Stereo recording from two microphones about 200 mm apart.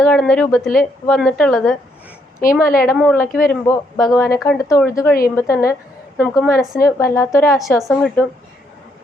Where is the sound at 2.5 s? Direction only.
15° left (ahead or behind).